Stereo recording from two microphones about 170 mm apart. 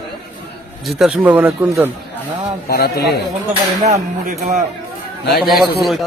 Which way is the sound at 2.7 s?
65° left (ahead or behind).